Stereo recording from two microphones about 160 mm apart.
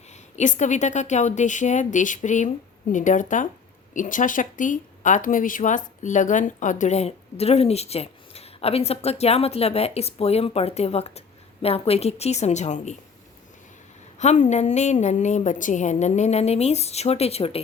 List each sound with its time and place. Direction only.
0.3 s a woman's voice: 50° left (ahead or behind)
14.2 s a woman's voice: 45° left (ahead or behind)